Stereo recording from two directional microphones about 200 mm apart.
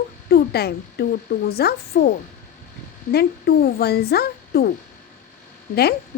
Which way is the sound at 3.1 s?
50° left (ahead or behind).